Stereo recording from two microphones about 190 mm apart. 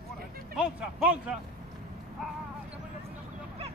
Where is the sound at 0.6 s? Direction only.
5° right (ahead or behind).